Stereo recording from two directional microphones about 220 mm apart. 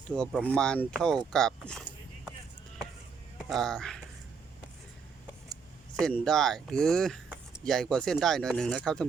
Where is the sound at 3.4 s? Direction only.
Centre (ahead or behind).